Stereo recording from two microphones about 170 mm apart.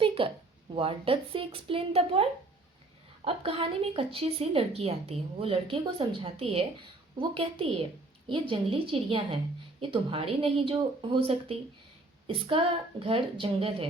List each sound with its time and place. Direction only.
0.0 s a sound: 30° right (ahead or behind)
0.8 s speech: 35° right (ahead or behind)
3.2 s speech: 35° right (ahead or behind)